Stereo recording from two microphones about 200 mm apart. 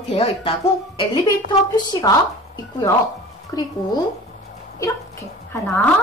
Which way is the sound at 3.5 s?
20° left (ahead or behind).